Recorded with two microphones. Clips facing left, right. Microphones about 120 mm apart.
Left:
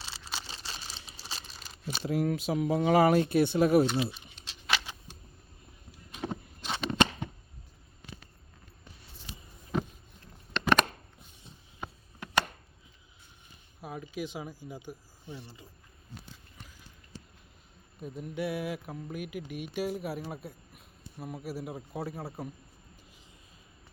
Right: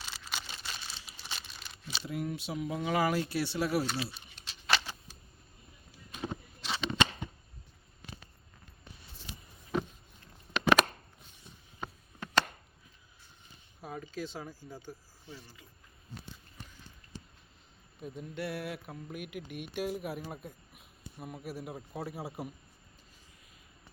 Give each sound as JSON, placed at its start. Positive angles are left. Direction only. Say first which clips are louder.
{"t": 0.0, "sound": "crumpling", "louder": "left 1 dB", "side_deg": 30}
{"t": 2.0, "sound": "speech", "louder": "left 8 dB", "side_deg": 80}
{"t": 2.5, "sound": "mantra", "louder": "left 8 dB", "side_deg": 40}
{"t": 3.1, "sound": "speech", "louder": "left 8 dB", "side_deg": 55}
{"t": 3.8, "sound": "speech", "louder": "left 6 dB", "side_deg": 20}
{"t": 6.6, "sound": "a sound", "louder": "left 3 dB", "side_deg": 50}
{"t": 10.5, "sound": "a sound", "louder": "even", "side_deg": -5}
{"t": 11.8, "sound": "a sound", "louder": "even", "side_deg": 10}
{"t": 13.8, "sound": "speech", "louder": "left 2 dB", "side_deg": 5}
{"t": 18.0, "sound": "speech", "louder": "left 4 dB", "side_deg": 0}